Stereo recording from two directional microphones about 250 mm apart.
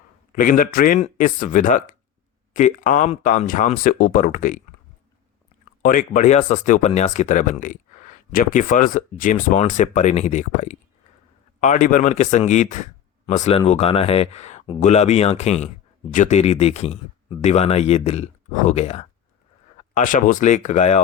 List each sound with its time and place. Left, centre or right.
0.3 s speech: left
5.8 s speech: left